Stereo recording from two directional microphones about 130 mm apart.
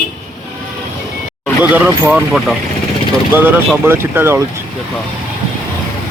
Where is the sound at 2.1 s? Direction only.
5° right (ahead or behind).